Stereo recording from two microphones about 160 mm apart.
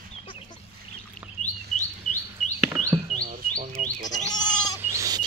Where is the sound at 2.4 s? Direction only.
Centre (ahead or behind).